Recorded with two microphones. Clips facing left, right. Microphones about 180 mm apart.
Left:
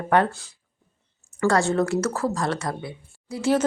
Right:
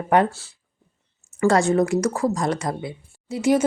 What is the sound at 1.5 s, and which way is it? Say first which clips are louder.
Speech: right 3 dB; 20° right (ahead or behind).